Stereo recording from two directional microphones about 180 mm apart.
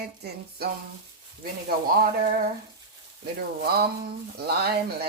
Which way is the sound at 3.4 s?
60° right (ahead or behind).